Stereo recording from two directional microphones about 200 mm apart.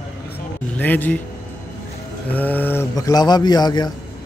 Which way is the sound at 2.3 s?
10° left (ahead or behind).